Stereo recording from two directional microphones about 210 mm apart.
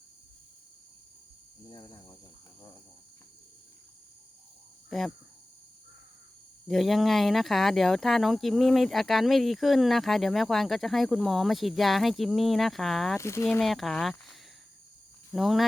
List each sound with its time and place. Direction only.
1.7 s cricket: 20° left (ahead or behind)
4.9 s speech: centre (ahead or behind)
6.7 s speech: centre (ahead or behind)
13.1 s speech: 15° left (ahead or behind)